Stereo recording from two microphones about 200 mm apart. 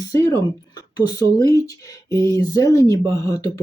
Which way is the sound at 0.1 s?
15° left (ahead or behind).